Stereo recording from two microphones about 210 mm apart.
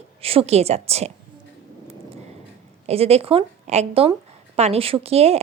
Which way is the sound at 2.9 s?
30° right (ahead or behind).